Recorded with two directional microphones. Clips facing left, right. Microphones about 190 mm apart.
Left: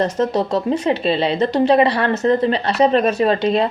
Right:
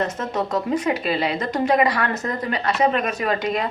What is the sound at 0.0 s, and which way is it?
A woman's voice, 35° left (ahead or behind).